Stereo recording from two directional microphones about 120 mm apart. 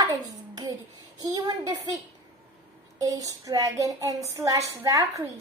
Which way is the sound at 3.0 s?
30° right (ahead or behind).